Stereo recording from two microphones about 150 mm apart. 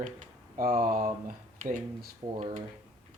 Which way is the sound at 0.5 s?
65° right (ahead or behind).